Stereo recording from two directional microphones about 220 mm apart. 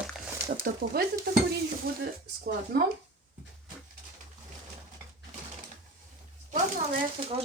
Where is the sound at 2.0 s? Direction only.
45° right (ahead or behind).